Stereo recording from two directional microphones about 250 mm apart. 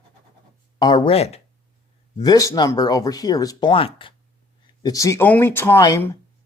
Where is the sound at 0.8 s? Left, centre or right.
Centre.